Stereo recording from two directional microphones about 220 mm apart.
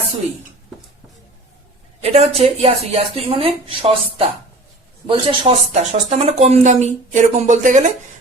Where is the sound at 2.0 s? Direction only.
30° right (ahead or behind).